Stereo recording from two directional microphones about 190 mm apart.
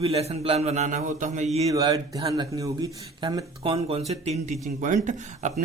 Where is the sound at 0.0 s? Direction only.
30° right (ahead or behind).